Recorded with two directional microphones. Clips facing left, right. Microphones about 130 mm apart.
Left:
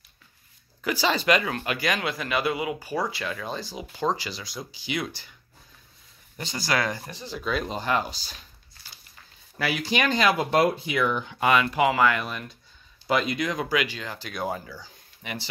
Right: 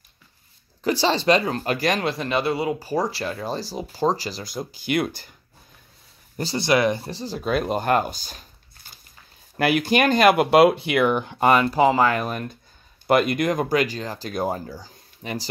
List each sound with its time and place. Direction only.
0.8 s speech: 35° right (ahead or behind); by 5.3 s 50° right (ahead or behind)
6.3 s speech: 35° right (ahead or behind)
6.6 s speech: 20° right (ahead or behind)
7.1 s speech: 35° right (ahead or behind)
7.5 s speech: 55° right (ahead or behind)
13.0 s speech: 55° right (ahead or behind); by 15.4 s 40° right (ahead or behind)